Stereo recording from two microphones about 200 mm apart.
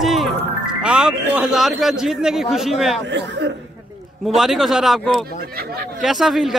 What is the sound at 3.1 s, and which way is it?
Speech, 60° right (ahead or behind).